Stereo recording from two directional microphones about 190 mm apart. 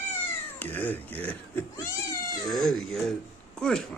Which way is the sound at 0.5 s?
10° left (ahead or behind).